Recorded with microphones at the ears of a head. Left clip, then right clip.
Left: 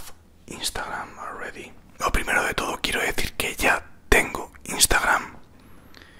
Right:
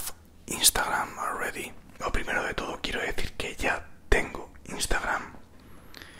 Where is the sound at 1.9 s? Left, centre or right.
Left.